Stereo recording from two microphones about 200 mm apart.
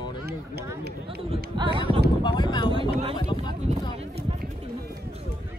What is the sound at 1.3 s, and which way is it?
Speech, 25° right (ahead or behind).